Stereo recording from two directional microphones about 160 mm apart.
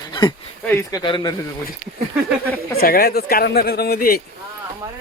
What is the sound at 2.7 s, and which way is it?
Speech, 65° left (ahead or behind).